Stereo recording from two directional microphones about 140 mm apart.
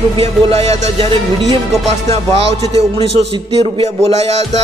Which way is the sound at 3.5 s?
45° right (ahead or behind).